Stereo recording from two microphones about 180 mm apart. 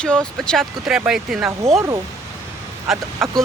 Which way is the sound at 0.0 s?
5° left (ahead or behind).